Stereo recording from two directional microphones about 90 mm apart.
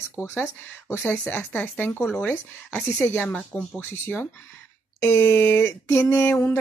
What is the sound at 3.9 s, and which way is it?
Speech, 25° left (ahead or behind).